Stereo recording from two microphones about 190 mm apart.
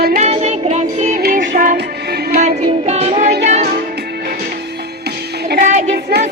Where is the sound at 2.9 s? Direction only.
35° right (ahead or behind).